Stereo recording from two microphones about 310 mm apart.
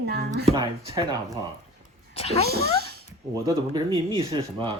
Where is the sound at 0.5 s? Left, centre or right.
Centre.